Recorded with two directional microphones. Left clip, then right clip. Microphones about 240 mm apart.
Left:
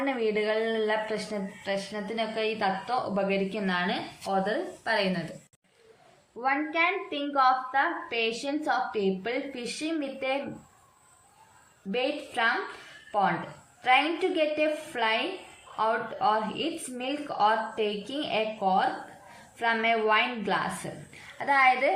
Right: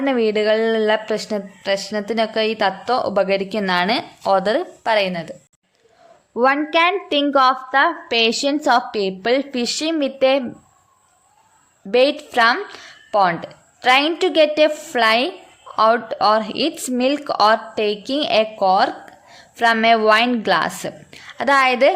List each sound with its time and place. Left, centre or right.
0.0 s speech: right
6.4 s speech: right
11.9 s speech: right
13.1 s a sound: right
13.8 s a woman's voice: right